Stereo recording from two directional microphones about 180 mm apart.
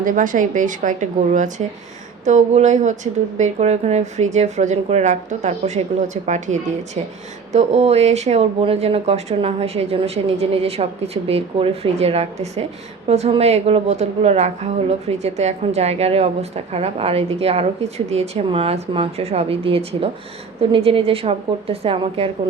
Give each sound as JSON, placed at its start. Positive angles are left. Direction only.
{"t": 0.0, "sound": "a woman's voice", "side_deg": -45}